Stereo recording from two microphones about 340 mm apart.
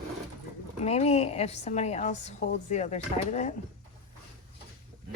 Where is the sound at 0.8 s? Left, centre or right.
Centre.